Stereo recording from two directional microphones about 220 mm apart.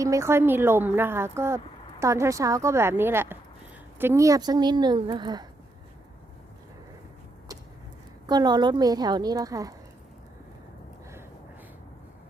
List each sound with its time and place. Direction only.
0.0 s a woman's voice: 15° right (ahead or behind)
8.3 s a woman's voice: 20° right (ahead or behind)